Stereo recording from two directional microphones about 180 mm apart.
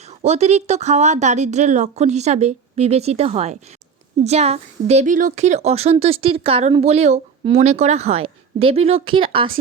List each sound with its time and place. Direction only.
0.1 s a woman's voice: 35° right (ahead or behind)